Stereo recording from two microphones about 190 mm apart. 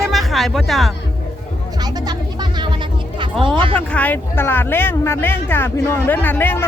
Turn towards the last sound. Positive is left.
turn(degrees=10)  # may be behind; listen again after turning